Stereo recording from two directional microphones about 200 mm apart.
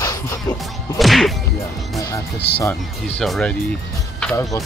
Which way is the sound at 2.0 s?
15° left (ahead or behind).